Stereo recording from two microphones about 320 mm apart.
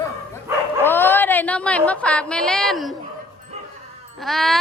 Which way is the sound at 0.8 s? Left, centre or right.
Centre.